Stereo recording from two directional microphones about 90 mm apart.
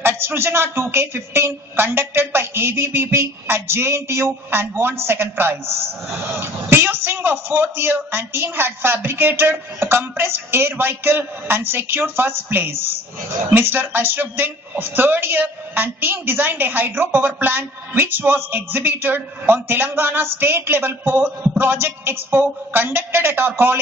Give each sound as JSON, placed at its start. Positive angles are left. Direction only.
{"t": 0.0, "sound": "a man's voice", "side_deg": -25}